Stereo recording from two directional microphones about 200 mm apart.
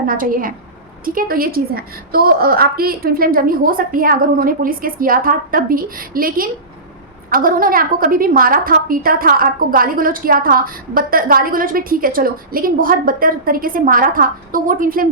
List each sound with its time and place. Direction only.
0.0 s a woman's voice: 45° right (ahead or behind)